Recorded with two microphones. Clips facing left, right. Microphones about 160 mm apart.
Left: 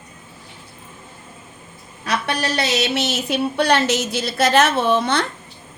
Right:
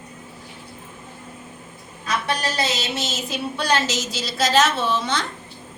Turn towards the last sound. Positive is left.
turn(degrees=60)  # may be behind; listen again after turning